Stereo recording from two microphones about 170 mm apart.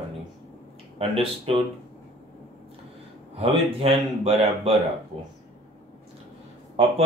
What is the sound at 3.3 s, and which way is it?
Speech, 35° right (ahead or behind).